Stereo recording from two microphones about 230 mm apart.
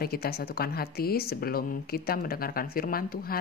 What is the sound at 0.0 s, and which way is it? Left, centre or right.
A woman's voice, left.